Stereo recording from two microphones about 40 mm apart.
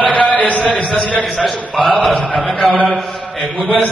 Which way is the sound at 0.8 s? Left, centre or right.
Left.